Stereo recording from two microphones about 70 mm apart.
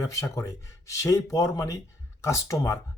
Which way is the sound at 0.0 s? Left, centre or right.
Left.